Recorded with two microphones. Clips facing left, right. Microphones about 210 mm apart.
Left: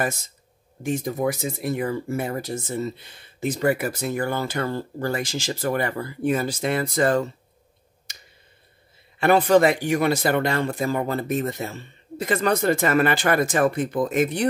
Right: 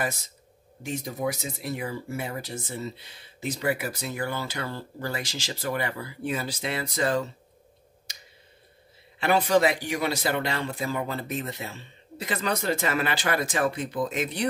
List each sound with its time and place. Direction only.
0.8 s speech: 50° left (ahead or behind)
8.1 s clicking: 50° left (ahead or behind)
9.2 s speech: 55° left (ahead or behind)